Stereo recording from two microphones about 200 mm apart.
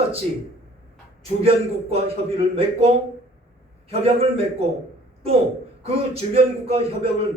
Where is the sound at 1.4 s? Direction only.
30° right (ahead or behind).